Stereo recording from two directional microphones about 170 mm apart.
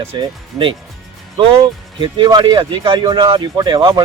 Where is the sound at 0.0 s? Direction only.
30° right (ahead or behind).